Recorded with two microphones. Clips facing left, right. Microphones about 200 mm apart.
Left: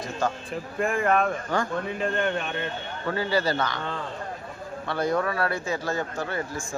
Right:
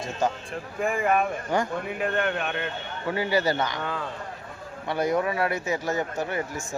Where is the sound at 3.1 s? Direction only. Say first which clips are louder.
Right 1 dB; 15° right (ahead or behind).